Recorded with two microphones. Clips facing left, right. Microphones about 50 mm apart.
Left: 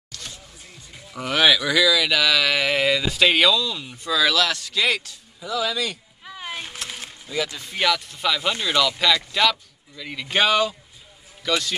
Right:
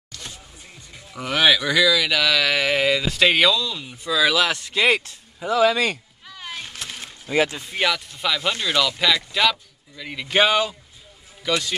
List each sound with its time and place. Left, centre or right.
0.1 s music: centre
1.1 s speech: centre; by 5.9 s right
6.2 s a sound: centre
7.2 s speech: right
7.6 s speech: centre